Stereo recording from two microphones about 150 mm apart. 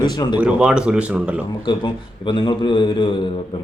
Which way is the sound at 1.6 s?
30° left (ahead or behind).